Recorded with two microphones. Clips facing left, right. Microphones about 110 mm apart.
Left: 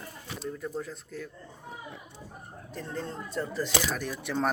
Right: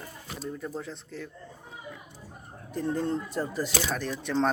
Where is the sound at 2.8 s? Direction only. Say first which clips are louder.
Right 8 dB; 15° right (ahead or behind).